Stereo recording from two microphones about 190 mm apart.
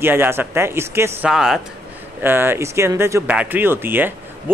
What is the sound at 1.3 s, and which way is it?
Speech, centre (ahead or behind).